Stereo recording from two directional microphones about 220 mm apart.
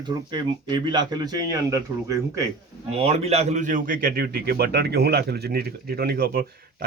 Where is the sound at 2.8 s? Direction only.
30° right (ahead or behind).